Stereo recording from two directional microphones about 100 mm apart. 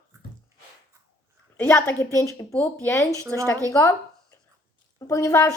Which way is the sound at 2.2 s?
30° left (ahead or behind).